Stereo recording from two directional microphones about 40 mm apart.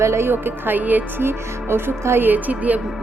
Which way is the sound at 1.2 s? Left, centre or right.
Right.